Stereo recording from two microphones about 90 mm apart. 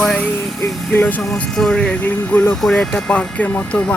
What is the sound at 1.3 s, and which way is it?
Speech, 5° left (ahead or behind).